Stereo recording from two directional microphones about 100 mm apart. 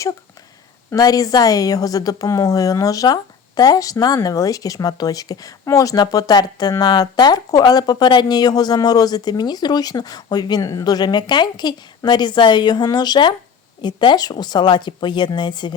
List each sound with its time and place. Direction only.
0.9 s a woman's voice: 40° left (ahead or behind)